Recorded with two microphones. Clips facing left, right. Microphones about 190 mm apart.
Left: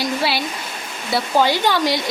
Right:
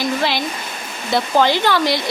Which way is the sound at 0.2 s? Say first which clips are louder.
Right 1 dB; 10° left (ahead or behind).